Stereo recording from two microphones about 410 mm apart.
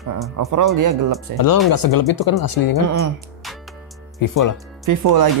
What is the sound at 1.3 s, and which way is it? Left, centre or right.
Speech, left.